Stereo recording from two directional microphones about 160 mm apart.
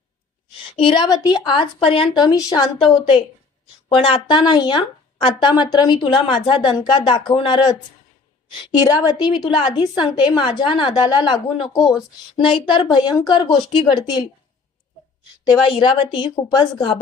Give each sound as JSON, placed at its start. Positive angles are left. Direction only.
{"t": 0.8, "sound": "speech", "side_deg": 30}
{"t": 15.7, "sound": "a woman's voice", "side_deg": 35}